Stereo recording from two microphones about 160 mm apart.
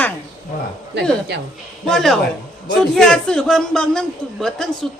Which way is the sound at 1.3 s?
90° right.